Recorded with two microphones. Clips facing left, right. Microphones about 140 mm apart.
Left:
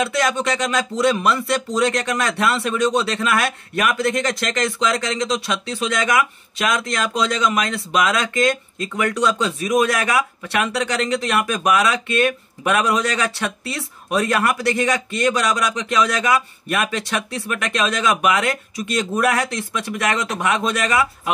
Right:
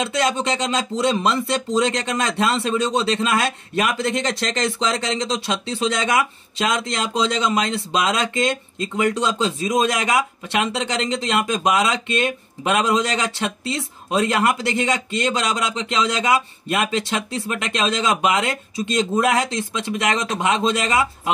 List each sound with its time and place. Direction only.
0.0 s speech: 25° right (ahead or behind)